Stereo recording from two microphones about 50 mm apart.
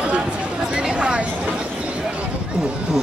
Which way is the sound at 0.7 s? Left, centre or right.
Centre.